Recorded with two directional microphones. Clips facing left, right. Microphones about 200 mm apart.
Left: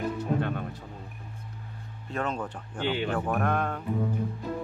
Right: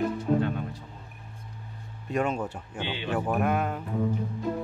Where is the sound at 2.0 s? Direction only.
10° right (ahead or behind).